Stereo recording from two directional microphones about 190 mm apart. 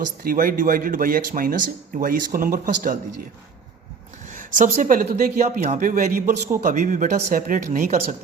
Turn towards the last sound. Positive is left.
turn(degrees=-40)  # may be behind; listen again after turning